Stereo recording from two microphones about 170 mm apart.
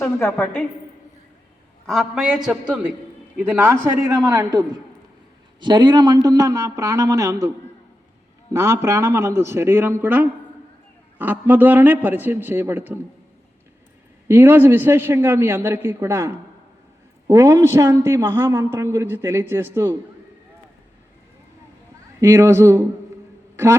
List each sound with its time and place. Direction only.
0.0 s a woman's voice: 15° left (ahead or behind)
1.9 s a man's voice: centre (ahead or behind)
3.4 s a man's voice: 10° right (ahead or behind)
8.5 s a man's voice: 15° right (ahead or behind)
14.3 s a man's voice: 15° right (ahead or behind)
22.2 s a man's voice: 15° right (ahead or behind)